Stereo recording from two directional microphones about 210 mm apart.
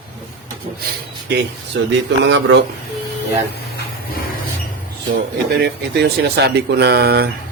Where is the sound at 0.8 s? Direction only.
50° right (ahead or behind).